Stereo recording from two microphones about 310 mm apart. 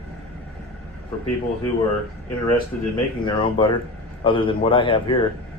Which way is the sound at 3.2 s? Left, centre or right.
Centre.